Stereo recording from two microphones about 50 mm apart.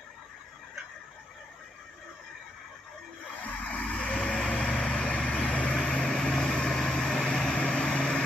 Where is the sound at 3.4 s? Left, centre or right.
Left.